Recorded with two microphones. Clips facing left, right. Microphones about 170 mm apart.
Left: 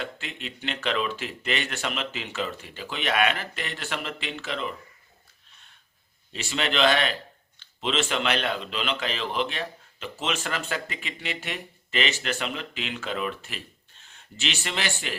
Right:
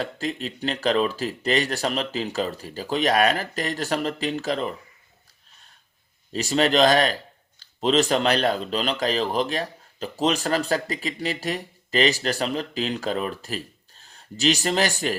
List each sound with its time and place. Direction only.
0.0 s a man's voice: 35° right (ahead or behind)
5.5 s snort: 40° right (ahead or behind)
6.3 s a man's voice: 40° right (ahead or behind)